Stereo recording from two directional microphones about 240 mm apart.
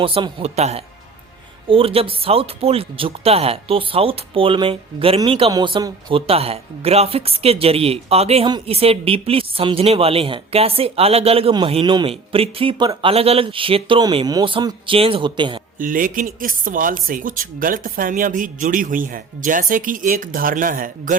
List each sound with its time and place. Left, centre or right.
0.0 s speech: right
15.8 s speech: right